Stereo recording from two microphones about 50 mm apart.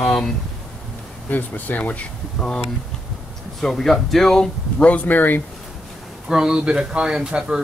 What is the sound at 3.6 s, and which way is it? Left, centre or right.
Speech, centre.